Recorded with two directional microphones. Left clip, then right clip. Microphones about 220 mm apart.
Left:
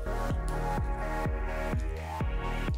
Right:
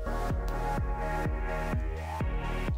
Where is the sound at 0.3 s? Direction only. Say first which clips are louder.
Even; centre (ahead or behind).